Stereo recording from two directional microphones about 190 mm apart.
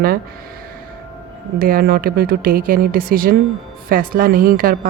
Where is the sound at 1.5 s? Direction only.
50° right (ahead or behind).